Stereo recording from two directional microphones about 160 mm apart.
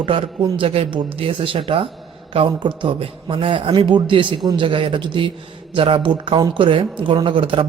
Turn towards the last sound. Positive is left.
turn(degrees=-30)  # may be behind; listen again after turning